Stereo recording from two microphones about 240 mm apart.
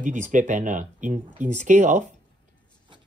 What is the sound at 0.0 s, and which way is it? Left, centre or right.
Speech, right.